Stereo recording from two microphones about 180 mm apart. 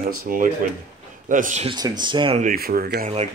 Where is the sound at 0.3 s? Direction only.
50° right (ahead or behind).